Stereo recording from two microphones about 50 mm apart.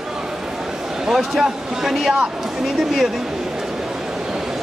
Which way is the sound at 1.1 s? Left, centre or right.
Centre.